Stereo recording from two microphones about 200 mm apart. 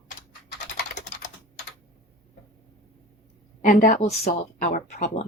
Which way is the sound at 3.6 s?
40° left (ahead or behind).